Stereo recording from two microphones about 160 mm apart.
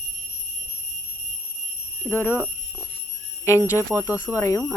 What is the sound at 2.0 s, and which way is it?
Speech, 15° left (ahead or behind).